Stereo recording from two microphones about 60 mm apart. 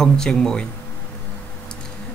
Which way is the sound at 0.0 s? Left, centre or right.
Centre.